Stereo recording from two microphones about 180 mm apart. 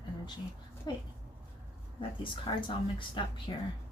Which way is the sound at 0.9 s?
25° left (ahead or behind).